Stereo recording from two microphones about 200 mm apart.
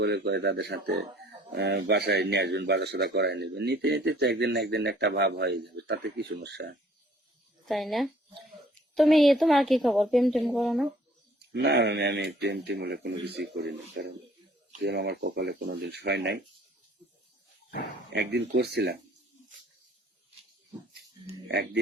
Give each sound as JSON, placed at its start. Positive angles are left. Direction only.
{"t": 0.0, "sound": "a man's voice", "side_deg": -60}
{"t": 7.6, "sound": "a woman's voice", "side_deg": 0}
{"t": 11.5, "sound": "a man's voice", "side_deg": -55}
{"t": 18.1, "sound": "a man's voice", "side_deg": -60}
{"t": 21.4, "sound": "speech", "side_deg": -55}